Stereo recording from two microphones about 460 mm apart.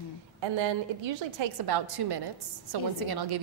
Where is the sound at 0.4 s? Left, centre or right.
Right.